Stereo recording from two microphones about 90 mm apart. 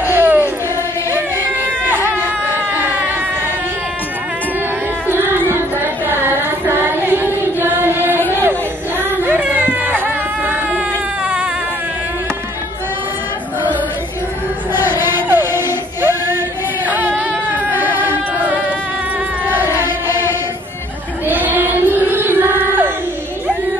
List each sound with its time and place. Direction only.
0.0 s a sound: 25° right (ahead or behind)
5.0 s music: 25° right (ahead or behind)
6.8 s child singing: 25° right (ahead or behind)
8.3 s chatter: 25° right (ahead or behind)
9.2 s a sound: 20° right (ahead or behind)
14.7 s music: 25° right (ahead or behind)
16.8 s a sound: 20° right (ahead or behind)
17.6 s music: 25° right (ahead or behind)
19.4 s chant: 25° right (ahead or behind)
21.3 s child singing: 20° right (ahead or behind)